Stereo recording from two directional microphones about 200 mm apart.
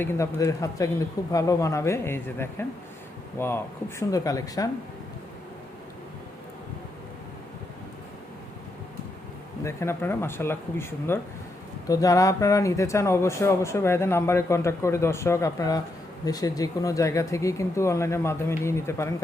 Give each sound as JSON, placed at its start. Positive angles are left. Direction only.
{"t": 0.0, "sound": "speech", "side_deg": 15}
{"t": 9.6, "sound": "speech", "side_deg": 10}